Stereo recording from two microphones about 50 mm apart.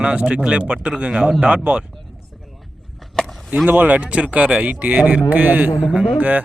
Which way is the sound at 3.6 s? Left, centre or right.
Right.